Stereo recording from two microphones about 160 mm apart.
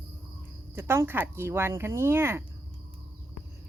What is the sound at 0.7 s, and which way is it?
Speech, 15° right (ahead or behind).